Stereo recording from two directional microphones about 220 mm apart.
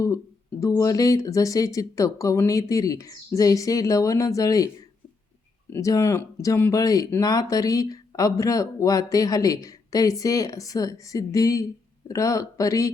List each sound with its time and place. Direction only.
0.6 s speech: 15° left (ahead or behind)
5.7 s speech: 15° left (ahead or behind)